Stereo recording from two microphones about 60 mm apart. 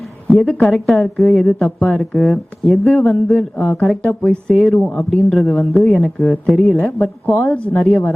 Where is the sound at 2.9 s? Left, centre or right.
Centre.